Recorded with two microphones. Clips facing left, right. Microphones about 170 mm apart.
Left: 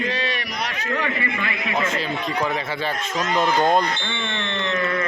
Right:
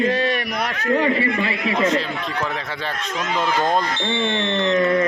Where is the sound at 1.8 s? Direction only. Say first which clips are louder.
Right 3 dB; centre (ahead or behind).